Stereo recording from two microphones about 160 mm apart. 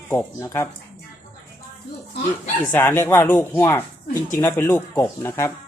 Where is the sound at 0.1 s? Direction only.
15° left (ahead or behind).